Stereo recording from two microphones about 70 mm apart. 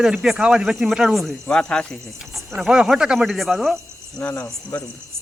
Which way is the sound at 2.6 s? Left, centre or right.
Centre.